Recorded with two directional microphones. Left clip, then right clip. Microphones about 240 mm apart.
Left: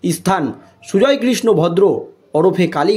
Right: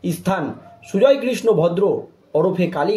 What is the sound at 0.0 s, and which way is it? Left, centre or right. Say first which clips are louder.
Speech: left 5 dB; left.